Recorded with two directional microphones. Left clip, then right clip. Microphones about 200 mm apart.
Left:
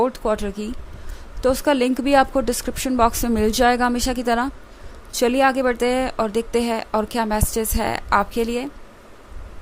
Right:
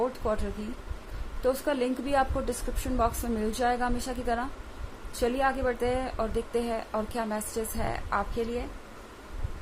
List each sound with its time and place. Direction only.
0.2 s speech: 45° left (ahead or behind)